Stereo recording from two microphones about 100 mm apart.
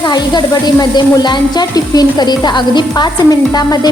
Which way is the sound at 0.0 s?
45° left (ahead or behind).